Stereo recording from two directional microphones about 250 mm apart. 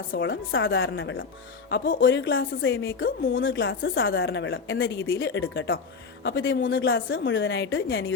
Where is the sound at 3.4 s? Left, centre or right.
Left.